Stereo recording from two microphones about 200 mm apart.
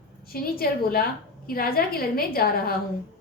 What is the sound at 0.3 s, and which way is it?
A woman's voice, 50° left (ahead or behind).